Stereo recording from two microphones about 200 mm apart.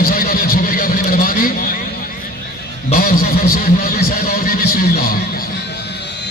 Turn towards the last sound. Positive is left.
turn(degrees=45)  # may be behind; listen again after turning